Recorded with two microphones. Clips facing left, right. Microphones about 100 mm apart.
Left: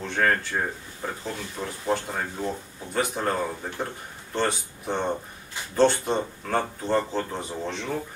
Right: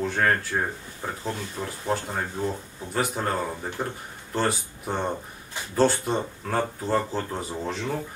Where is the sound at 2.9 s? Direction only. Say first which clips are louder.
Left 1 dB; centre (ahead or behind).